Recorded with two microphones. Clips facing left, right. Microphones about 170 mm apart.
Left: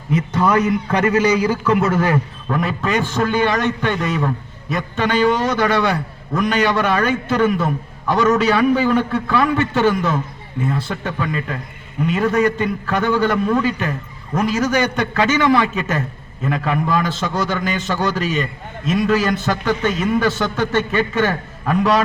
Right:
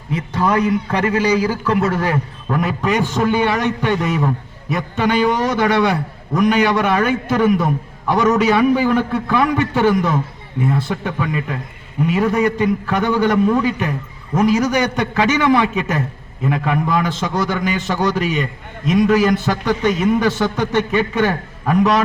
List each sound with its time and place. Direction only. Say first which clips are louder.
1.1 s a man's voice: even; 30° right (ahead or behind)
1.5 s a man's voice: left 1 dB; centre (ahead or behind); by 22.0 s 20° right (ahead or behind)